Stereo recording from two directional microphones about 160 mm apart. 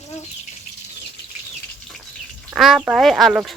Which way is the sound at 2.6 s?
Centre (ahead or behind).